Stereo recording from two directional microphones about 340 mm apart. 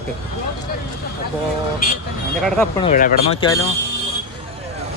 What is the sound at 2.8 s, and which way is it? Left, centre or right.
Speech, left.